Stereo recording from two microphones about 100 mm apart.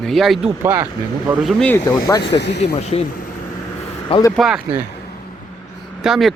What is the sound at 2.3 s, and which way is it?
Speech, 80° left.